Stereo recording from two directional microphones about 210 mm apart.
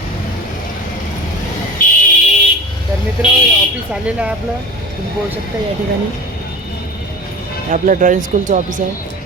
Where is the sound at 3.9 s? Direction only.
5° right (ahead or behind).